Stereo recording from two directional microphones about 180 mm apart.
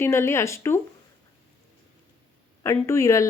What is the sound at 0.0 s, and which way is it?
Speech, 15° left (ahead or behind).